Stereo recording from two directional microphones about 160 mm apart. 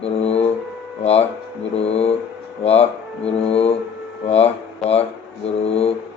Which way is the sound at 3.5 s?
40° left (ahead or behind).